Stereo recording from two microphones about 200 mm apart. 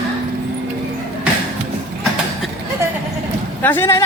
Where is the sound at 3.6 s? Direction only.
10° left (ahead or behind).